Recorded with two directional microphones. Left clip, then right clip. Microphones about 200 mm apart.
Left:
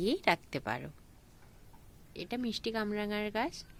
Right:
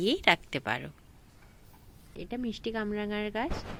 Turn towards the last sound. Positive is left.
turn(degrees=5)  # may be behind; listen again after turning